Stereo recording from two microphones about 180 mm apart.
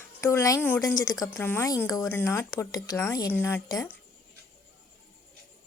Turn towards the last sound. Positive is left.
turn(degrees=15)  # may be behind; listen again after turning